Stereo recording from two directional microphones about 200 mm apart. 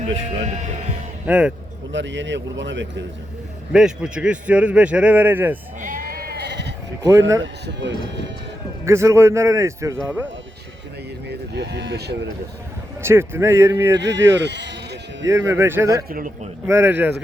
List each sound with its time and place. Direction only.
0.4 s speech: 35° right (ahead or behind)
1.3 s a man's voice: 5° right (ahead or behind)
1.9 s speech: 65° right (ahead or behind)
3.7 s a man's voice: 5° right (ahead or behind)
5.8 s sheep: 45° right (ahead or behind)
7.0 s a man's voice: 15° right (ahead or behind)
7.4 s speech: 60° right (ahead or behind)
8.8 s a man's voice: 15° right (ahead or behind)
11.3 s speech: 55° right (ahead or behind)
13.0 s a man's voice: 10° right (ahead or behind)
14.3 s sheep: 60° right (ahead or behind)
15.3 s a man's voice: 15° right (ahead or behind)
16.0 s a man's voice: 45° right (ahead or behind)
16.6 s a man's voice: 10° right (ahead or behind)